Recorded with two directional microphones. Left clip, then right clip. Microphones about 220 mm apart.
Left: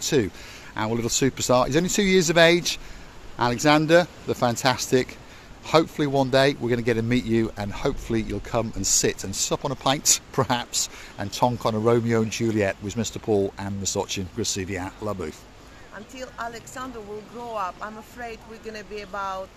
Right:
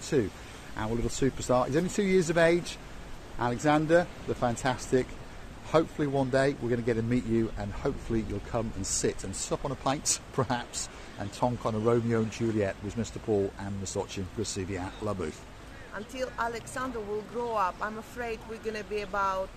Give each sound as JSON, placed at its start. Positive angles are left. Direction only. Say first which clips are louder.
{"t": 0.0, "sound": "speech", "louder": "left 6 dB", "side_deg": 45}
{"t": 16.2, "sound": "speech", "louder": "right 1 dB", "side_deg": -5}